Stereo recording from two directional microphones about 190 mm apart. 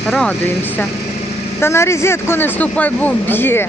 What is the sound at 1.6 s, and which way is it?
A man's voice, 15° left (ahead or behind).